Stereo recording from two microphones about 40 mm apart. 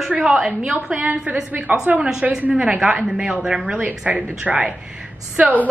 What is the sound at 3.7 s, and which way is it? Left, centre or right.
A woman's voice, right.